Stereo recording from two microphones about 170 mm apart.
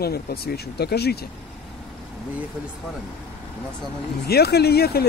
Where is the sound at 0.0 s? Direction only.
65° left (ahead or behind).